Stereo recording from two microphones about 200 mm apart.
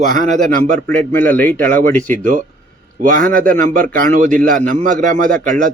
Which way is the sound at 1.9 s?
5° left (ahead or behind).